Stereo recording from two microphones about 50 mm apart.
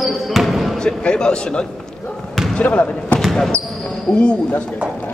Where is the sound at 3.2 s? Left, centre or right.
Centre.